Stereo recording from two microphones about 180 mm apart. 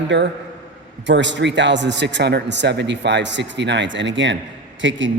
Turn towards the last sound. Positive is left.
turn(degrees=-90)